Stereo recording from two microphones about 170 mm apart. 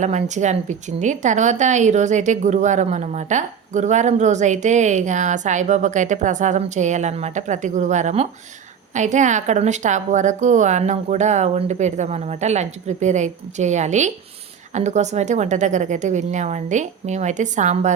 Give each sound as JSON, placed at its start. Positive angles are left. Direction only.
{"t": 0.0, "sound": "a woman's voice", "side_deg": -45}